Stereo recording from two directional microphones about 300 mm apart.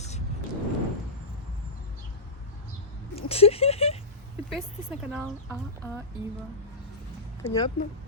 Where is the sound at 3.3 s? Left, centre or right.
Centre.